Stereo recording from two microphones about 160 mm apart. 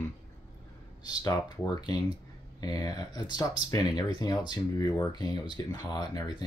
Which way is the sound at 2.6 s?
25° left (ahead or behind).